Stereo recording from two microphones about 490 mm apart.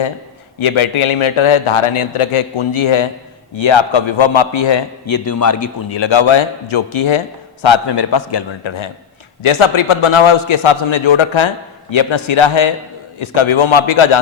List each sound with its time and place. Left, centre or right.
0.6 s a man's voice: left
3.6 s a man's voice: left
5.2 s a man's voice: left
5.9 s a man's voice: left
7.6 s a man's voice: left
9.4 s a man's voice: left